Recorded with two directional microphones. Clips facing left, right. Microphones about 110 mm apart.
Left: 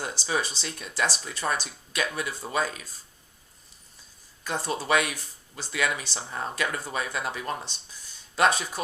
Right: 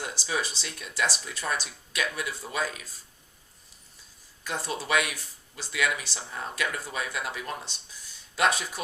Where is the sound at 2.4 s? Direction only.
35° left (ahead or behind).